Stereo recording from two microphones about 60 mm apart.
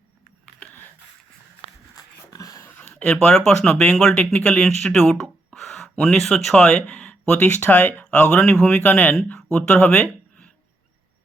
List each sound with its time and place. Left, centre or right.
2.3 s dog: left
2.9 s speech: centre
7.1 s speech: left
8.1 s speech: centre